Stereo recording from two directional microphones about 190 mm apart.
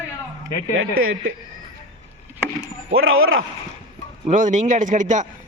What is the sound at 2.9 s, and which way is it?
Speech, 90° right.